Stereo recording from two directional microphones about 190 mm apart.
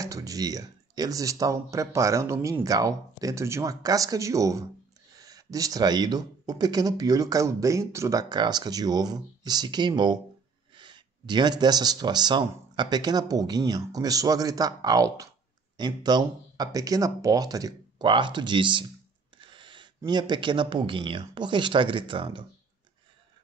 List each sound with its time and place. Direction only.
0.0 s speech: 20° right (ahead or behind)
19.3 s a sound: 25° right (ahead or behind)
20.0 s speech: 25° right (ahead or behind)